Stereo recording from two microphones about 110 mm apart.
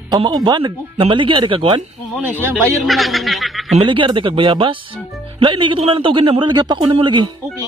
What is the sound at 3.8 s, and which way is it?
A man's voice, 50° right (ahead or behind).